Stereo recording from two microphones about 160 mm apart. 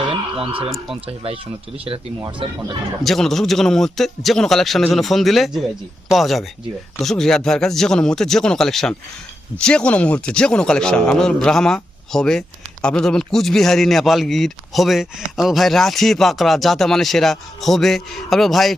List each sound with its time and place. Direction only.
0.0 s a sound: 35° right (ahead or behind)
1.0 s speech: 35° right (ahead or behind)
2.4 s speech: 35° right (ahead or behind)
3.0 s speech: centre (ahead or behind)